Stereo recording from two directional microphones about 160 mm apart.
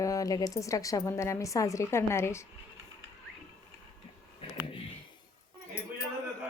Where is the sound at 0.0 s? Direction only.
20° left (ahead or behind).